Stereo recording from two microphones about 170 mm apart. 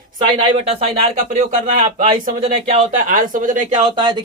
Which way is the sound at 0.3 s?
30° right (ahead or behind).